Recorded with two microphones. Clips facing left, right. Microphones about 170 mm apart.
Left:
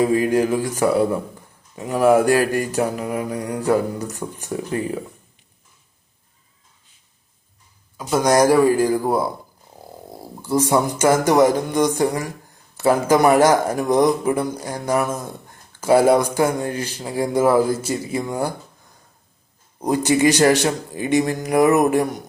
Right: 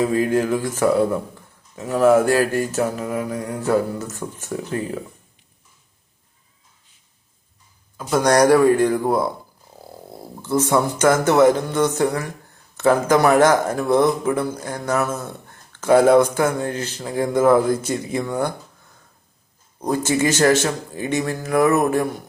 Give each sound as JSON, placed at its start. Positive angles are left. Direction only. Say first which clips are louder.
{"t": 0.0, "sound": "speech", "louder": "left 2 dB", "side_deg": 10}
{"t": 7.9, "sound": "speech", "louder": "even", "side_deg": 5}
{"t": 19.8, "sound": "speech", "louder": "left 3 dB", "side_deg": 15}